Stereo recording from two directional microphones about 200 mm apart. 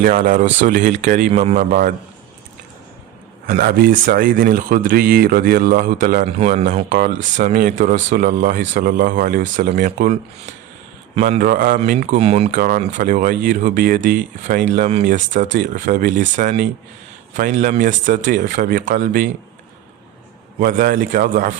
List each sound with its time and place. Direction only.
0.0 s speech: 40° right (ahead or behind)
3.4 s speech: 45° right (ahead or behind)
12.1 s speech: 30° right (ahead or behind)
12.5 s speech: 40° right (ahead or behind)
20.6 s speech: 45° right (ahead or behind)